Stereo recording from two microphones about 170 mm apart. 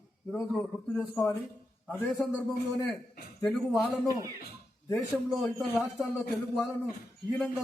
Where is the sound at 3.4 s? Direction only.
Centre (ahead or behind).